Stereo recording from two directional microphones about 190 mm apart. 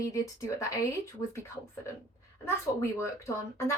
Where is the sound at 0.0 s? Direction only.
15° left (ahead or behind).